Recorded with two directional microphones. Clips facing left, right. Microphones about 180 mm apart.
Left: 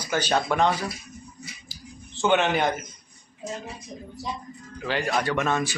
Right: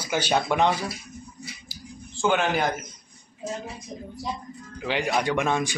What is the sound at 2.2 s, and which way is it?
Speech, centre (ahead or behind).